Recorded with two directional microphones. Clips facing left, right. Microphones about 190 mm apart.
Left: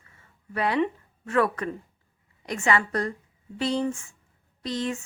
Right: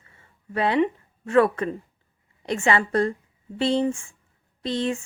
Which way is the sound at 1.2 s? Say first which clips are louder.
Right 5 dB; 25° right (ahead or behind).